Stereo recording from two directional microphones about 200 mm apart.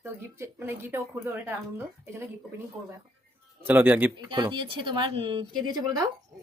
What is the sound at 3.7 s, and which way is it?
Speech, 10° right (ahead or behind).